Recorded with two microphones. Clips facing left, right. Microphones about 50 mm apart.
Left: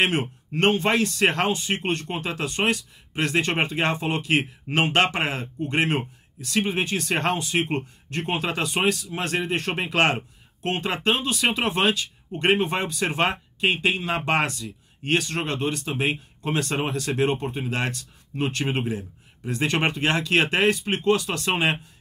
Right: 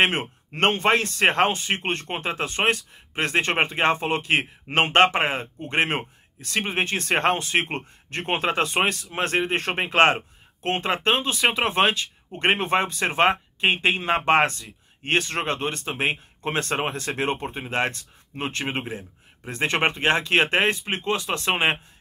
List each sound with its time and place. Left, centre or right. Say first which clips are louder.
0.0 s speech: right 1 dB; right